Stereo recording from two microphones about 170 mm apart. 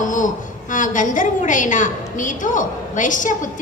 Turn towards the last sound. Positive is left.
turn(degrees=50)  # may be behind; listen again after turning